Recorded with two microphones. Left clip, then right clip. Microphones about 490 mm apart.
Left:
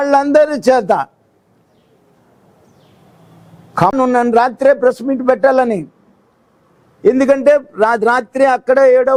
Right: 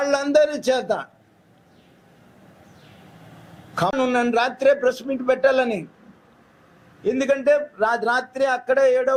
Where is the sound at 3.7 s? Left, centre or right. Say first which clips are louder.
Left 8 dB; left.